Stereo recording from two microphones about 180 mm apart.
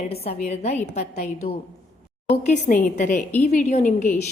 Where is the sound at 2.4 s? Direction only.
40° left (ahead or behind).